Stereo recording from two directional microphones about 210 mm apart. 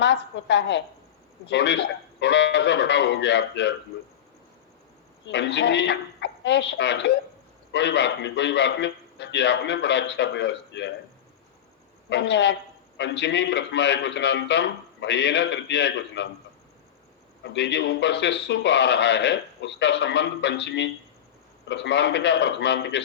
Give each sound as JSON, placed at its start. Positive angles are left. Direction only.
{"t": 0.0, "sound": "a man's voice", "side_deg": 55}
{"t": 5.2, "sound": "a woman's voice", "side_deg": 55}
{"t": 12.0, "sound": "a man's voice", "side_deg": 55}
{"t": 17.4, "sound": "a man's voice", "side_deg": 55}